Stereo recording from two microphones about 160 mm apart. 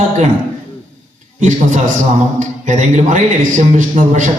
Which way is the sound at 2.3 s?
50° right (ahead or behind).